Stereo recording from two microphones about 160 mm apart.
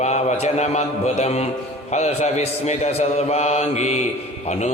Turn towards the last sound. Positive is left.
turn(degrees=45)  # may be behind; listen again after turning